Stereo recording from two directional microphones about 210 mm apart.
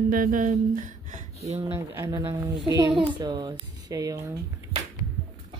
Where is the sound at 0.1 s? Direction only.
40° right (ahead or behind).